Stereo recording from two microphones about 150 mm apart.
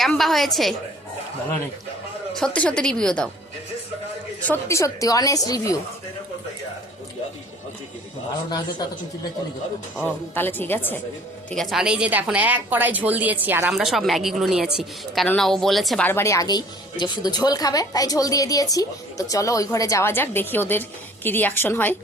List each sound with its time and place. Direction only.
0.0 s speech: centre (ahead or behind)
2.6 s speech: 5° left (ahead or behind)
4.4 s a woman's voice: 15° left (ahead or behind)
10.0 s a woman's voice: 15° left (ahead or behind)
11.5 s a woman's voice: centre (ahead or behind)
16.0 s a woman's voice: 15° left (ahead or behind)